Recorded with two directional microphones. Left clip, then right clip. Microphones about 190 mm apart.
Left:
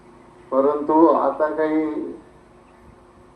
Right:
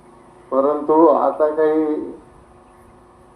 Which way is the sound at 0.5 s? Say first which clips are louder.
Right 2 dB; 25° left (ahead or behind).